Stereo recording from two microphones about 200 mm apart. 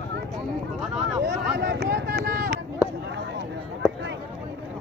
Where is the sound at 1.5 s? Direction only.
55° right (ahead or behind).